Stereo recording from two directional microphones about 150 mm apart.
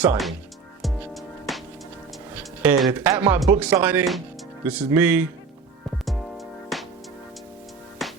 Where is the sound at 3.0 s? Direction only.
20° right (ahead or behind).